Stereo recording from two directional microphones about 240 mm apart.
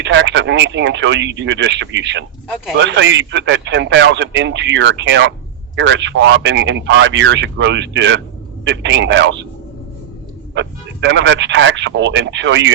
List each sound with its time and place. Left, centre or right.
0.0 s speech: right
10.5 s speech: right